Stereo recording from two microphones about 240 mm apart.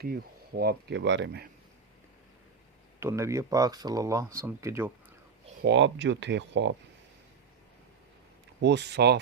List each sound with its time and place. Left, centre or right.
0.0 s speech: right
3.0 s speech: centre
5.6 s speech: right
8.6 s speech: right